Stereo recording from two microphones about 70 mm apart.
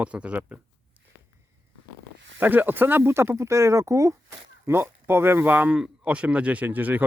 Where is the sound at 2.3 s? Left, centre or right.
Right.